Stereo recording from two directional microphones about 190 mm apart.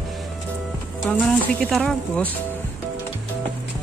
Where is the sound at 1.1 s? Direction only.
5° left (ahead or behind).